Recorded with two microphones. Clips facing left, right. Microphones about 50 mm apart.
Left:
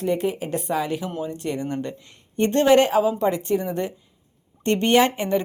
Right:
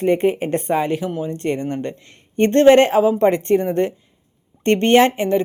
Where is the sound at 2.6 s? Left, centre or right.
Right.